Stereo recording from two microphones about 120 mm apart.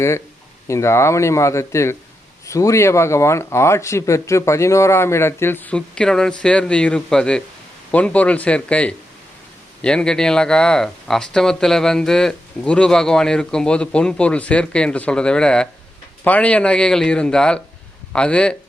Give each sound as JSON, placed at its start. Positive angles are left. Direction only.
{"t": 0.7, "sound": "speech", "side_deg": 25}